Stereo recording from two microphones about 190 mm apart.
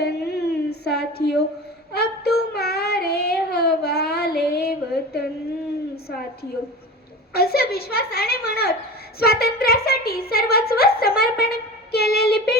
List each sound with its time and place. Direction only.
0.0 s a sound: 60° left (ahead or behind)
1.9 s child singing: 55° left (ahead or behind)
7.3 s a woman's voice: 55° left (ahead or behind)